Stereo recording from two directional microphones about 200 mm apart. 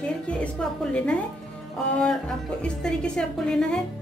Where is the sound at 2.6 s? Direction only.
5° left (ahead or behind).